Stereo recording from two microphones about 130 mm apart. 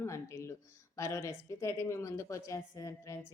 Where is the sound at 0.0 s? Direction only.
20° left (ahead or behind).